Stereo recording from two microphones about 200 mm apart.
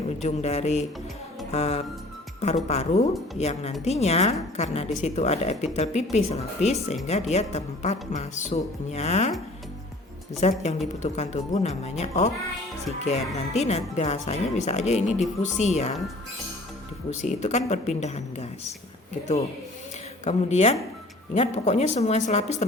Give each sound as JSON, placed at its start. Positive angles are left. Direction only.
{"t": 0.2, "sound": "a woman's voice", "side_deg": 35}
{"t": 1.5, "sound": "music", "side_deg": 35}
{"t": 2.6, "sound": "a woman's voice", "side_deg": 35}
{"t": 10.4, "sound": "a woman's voice", "side_deg": 35}
{"t": 17.1, "sound": "a woman's voice", "side_deg": 35}
{"t": 20.2, "sound": "a woman's voice", "side_deg": 35}